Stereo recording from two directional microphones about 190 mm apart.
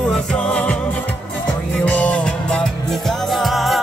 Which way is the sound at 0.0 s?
5° left (ahead or behind).